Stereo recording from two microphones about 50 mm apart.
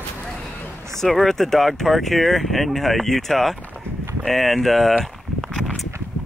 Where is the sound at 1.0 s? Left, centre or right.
Centre.